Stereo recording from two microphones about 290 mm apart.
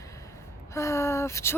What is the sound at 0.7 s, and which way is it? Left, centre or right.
Speech, centre.